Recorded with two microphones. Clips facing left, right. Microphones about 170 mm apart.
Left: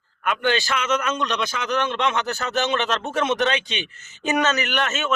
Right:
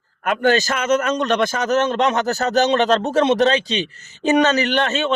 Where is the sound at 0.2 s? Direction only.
40° right (ahead or behind).